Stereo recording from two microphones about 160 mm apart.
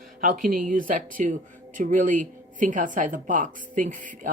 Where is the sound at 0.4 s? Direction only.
60° right (ahead or behind).